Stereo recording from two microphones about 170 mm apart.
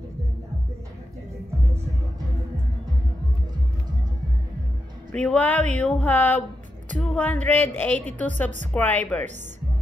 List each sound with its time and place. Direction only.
5.1 s speech: 5° left (ahead or behind)